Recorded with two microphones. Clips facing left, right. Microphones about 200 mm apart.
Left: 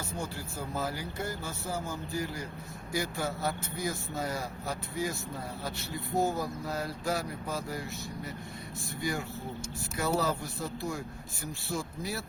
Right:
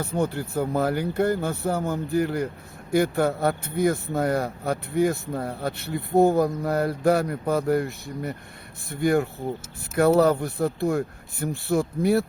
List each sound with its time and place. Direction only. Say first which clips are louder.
0.0 s speech: right 12 dB; 60° right (ahead or behind)